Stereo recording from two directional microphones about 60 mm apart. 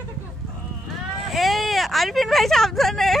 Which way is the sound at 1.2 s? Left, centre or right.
Centre.